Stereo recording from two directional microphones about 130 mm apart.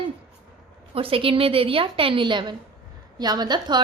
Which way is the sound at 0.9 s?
45° right (ahead or behind).